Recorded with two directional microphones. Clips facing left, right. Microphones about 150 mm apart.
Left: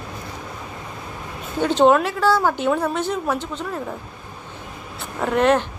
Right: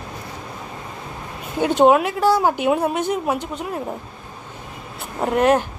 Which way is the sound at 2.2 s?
20° right (ahead or behind).